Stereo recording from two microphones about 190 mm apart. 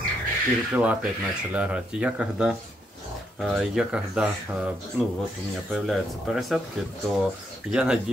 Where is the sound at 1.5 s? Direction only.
5° right (ahead or behind).